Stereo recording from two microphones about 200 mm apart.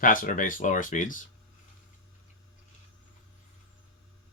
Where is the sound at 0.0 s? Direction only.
40° left (ahead or behind).